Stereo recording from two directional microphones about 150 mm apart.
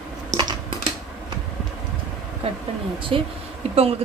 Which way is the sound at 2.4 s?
40° right (ahead or behind).